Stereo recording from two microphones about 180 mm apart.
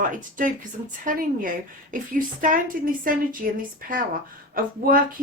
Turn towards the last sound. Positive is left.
turn(degrees=-50)  # may be behind; listen again after turning